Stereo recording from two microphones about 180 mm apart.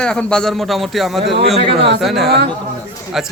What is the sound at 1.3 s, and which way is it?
Speech, 35° right (ahead or behind).